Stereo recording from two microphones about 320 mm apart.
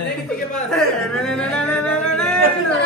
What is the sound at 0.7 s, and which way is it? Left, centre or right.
Singing, centre.